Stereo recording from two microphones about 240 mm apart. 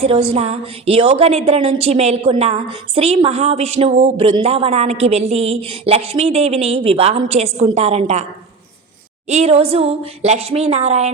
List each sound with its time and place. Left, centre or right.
0.0 s a woman's voice: right
9.3 s a woman's voice: right